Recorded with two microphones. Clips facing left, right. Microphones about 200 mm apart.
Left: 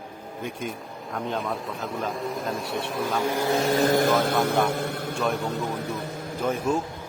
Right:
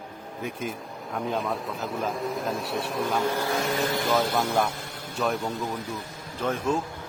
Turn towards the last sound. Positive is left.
turn(degrees=10)  # may be behind; listen again after turning